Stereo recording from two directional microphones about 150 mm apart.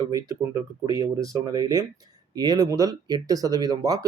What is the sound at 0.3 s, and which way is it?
Speech, 25° right (ahead or behind).